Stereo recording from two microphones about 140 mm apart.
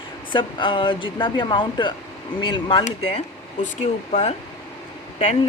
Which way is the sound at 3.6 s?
55° left (ahead or behind).